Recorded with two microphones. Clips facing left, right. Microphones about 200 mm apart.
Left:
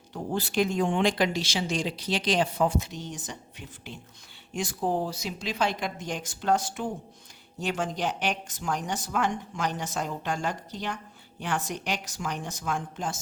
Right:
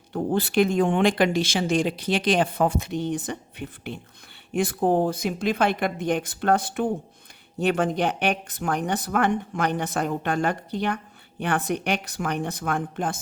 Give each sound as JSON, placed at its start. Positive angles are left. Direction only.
{"t": 0.1, "sound": "a woman's voice", "side_deg": -60}